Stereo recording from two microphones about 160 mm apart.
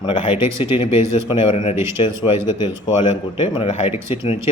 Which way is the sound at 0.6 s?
35° left (ahead or behind).